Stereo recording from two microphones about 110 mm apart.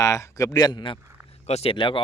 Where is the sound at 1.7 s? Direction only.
50° left (ahead or behind).